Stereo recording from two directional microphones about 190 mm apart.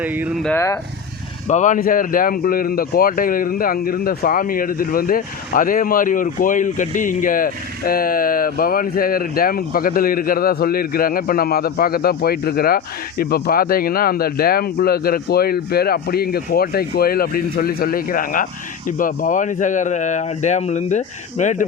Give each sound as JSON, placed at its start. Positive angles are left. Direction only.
{"t": 0.0, "sound": "speech", "side_deg": -10}
{"t": 0.4, "sound": "speech", "side_deg": 15}
{"t": 1.5, "sound": "speech", "side_deg": 40}